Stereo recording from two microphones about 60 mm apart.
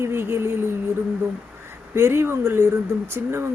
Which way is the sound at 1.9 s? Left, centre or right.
Right.